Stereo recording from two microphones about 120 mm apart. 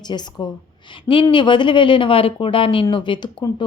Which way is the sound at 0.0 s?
35° left (ahead or behind).